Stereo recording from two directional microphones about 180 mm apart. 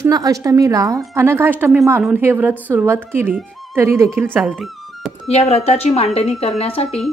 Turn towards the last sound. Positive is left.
turn(degrees=35)  # may be behind; listen again after turning